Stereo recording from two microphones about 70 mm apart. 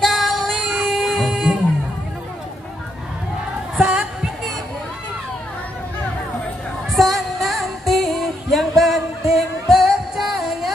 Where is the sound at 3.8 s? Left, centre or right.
Centre.